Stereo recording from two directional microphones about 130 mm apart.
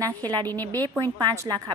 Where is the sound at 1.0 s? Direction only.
30° right (ahead or behind).